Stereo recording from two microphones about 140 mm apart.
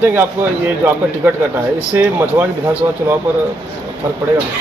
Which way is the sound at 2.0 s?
10° right (ahead or behind).